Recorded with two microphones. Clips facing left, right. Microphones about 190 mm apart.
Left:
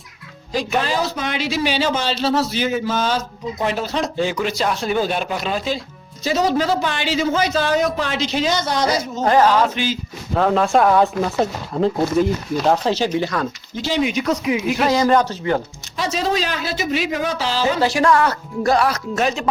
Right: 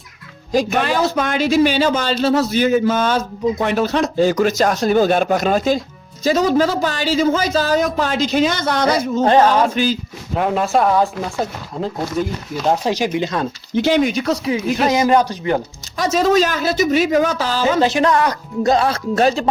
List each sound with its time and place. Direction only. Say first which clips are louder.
0.5 s a man's voice: right 4 dB; 45° right (ahead or behind)
0.8 s a man's voice: right 4 dB; 60° right (ahead or behind)
4.2 s a man's voice: right 8 dB; 40° right (ahead or behind)
9.2 s speech: right 1 dB; 25° right (ahead or behind)
9.7 s speech: right 5 dB; 40° right (ahead or behind)
10.3 s speech: left 1 dB; 10° right (ahead or behind)
12.8 s speech: even; 10° right (ahead or behind)
13.7 s speech: right 6 dB; 55° right (ahead or behind)
14.2 s speech: right 1 dB; 35° right (ahead or behind)
14.8 s speech: right 1 dB; 15° right (ahead or behind)
16.0 s a man's voice: right 6 dB; 45° right (ahead or behind)
17.7 s speech: right 1 dB; 20° right (ahead or behind)